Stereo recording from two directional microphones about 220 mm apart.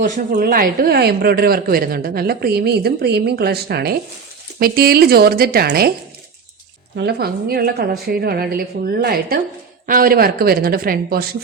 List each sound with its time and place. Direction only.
0.0 s a woman's voice: 40° right (ahead or behind)
6.9 s a woman's voice: 45° right (ahead or behind)